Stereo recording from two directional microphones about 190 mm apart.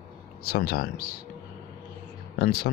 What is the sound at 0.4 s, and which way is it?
Speech, 55° left (ahead or behind).